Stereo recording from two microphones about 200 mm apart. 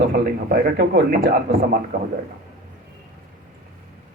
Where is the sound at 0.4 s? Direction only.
50° right (ahead or behind).